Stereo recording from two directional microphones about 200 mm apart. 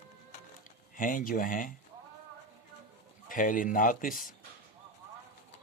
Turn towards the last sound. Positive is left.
turn(degrees=45)  # may be behind; listen again after turning